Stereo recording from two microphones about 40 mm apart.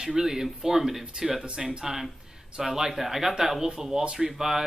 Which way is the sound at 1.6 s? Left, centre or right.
Centre.